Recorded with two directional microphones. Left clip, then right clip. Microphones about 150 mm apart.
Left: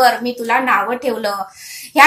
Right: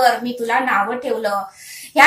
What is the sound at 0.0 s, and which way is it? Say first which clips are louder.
A woman's voice: left 2 dB; 30° left (ahead or behind).